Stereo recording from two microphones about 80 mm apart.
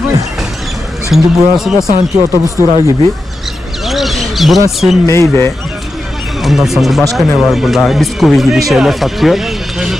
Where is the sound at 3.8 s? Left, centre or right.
Centre.